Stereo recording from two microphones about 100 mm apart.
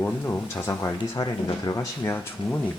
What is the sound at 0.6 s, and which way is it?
Speech, 30° left (ahead or behind).